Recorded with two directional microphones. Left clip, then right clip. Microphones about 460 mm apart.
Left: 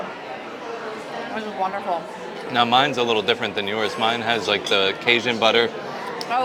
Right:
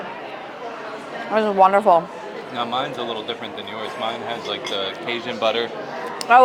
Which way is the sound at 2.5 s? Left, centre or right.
Left.